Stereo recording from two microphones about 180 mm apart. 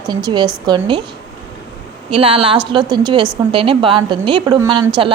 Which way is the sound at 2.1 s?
30° right (ahead or behind).